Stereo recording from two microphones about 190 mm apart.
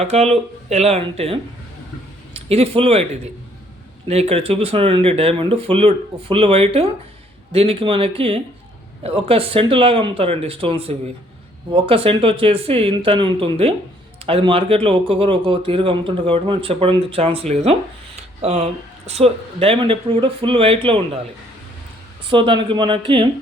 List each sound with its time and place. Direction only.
0.0 s speech: 35° right (ahead or behind)
4.1 s a man's voice: 35° right (ahead or behind)
22.3 s a man's voice: 25° right (ahead or behind)